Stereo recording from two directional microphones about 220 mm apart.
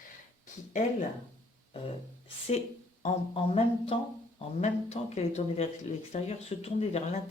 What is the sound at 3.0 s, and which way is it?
Speech, 30° left (ahead or behind).